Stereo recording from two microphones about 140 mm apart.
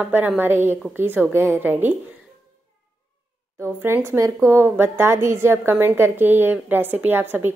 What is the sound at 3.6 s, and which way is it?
A woman's voice, 20° right (ahead or behind).